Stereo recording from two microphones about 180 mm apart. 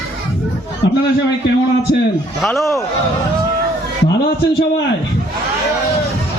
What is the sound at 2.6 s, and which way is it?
Speech, 15° left (ahead or behind).